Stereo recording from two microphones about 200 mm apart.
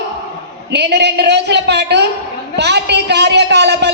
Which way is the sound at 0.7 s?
55° right (ahead or behind).